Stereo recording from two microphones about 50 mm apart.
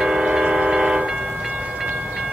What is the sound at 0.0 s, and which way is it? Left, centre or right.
Train, centre.